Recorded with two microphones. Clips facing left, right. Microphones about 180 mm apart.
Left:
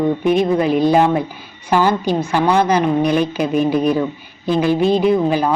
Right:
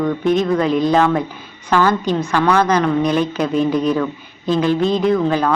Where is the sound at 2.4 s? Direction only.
25° left (ahead or behind).